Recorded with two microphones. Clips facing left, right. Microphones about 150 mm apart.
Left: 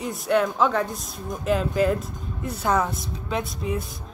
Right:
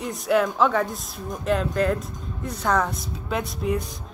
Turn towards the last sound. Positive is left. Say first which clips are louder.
# right 2 dB
turn(degrees=0)  # may be behind; listen again after turning